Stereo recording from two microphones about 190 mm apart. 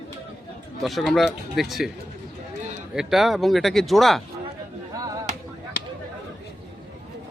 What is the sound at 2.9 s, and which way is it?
Speech, centre (ahead or behind).